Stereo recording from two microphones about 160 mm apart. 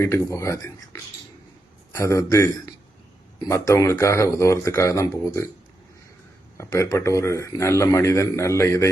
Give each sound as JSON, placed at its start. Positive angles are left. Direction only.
{"t": 0.0, "sound": "speech", "side_deg": 20}
{"t": 1.9, "sound": "speech", "side_deg": 20}
{"t": 6.6, "sound": "speech", "side_deg": 20}